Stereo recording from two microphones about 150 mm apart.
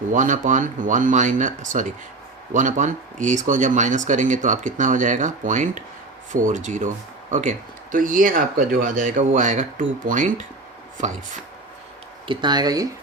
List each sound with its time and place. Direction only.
0.1 s speech: 55° right (ahead or behind)
12.3 s speech: 30° right (ahead or behind)